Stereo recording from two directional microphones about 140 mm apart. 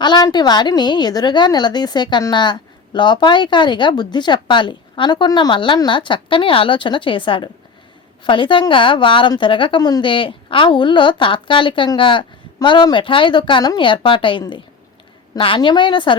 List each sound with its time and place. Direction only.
0.0 s a woman's voice: 30° left (ahead or behind)